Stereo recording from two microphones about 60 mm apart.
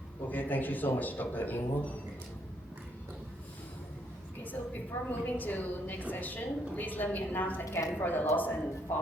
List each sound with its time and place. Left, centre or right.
0.3 s a man's voice: left
4.9 s a man's voice: left
7.7 s a man's voice: left